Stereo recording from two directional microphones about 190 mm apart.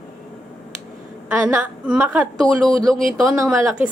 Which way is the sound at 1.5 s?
10° right (ahead or behind).